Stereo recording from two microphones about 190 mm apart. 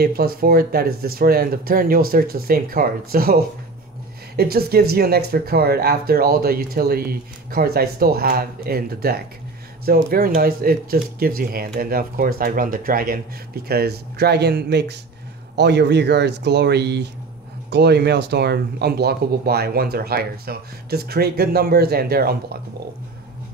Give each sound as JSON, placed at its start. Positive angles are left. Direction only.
{"t": 0.0, "sound": "speech", "side_deg": -55}
{"t": 4.4, "sound": "speech", "side_deg": -55}